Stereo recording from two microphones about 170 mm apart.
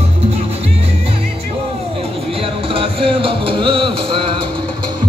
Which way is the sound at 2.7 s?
30° right (ahead or behind).